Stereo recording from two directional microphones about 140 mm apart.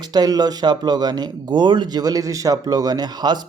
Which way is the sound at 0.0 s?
30° right (ahead or behind).